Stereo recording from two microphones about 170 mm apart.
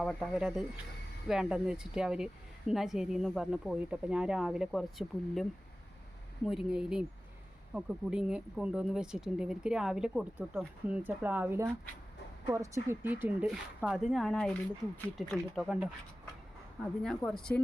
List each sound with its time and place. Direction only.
0.0 s speech: centre (ahead or behind)